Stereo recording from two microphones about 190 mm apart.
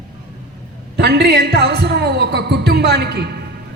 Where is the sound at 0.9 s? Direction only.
60° right (ahead or behind).